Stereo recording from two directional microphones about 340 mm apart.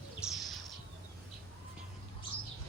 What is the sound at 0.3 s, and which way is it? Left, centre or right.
Bird, centre.